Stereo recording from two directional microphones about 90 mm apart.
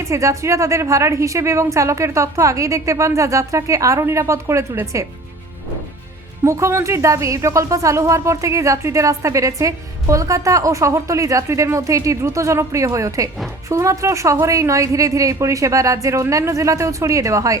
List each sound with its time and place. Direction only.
0.0 s speech: 35° right (ahead or behind)
6.4 s speech: 35° right (ahead or behind)